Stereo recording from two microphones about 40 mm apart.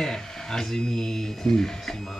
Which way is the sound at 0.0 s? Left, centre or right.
Centre.